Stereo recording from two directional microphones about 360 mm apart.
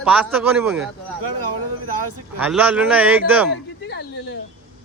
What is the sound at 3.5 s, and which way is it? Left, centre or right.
Speech, left.